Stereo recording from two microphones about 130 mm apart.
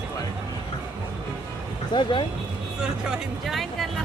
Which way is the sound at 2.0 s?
40° left (ahead or behind).